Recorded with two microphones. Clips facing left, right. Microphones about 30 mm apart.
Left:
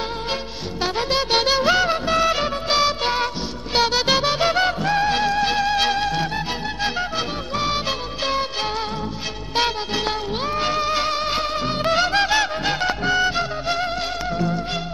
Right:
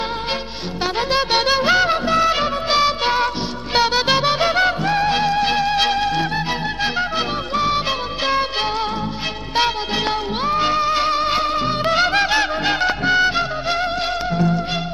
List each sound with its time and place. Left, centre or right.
0.9 s music: right
4.6 s music: right
9.6 s music: right
10.5 s music: right